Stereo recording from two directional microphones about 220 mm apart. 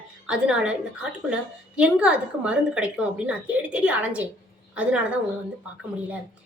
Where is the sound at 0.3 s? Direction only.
5° right (ahead or behind).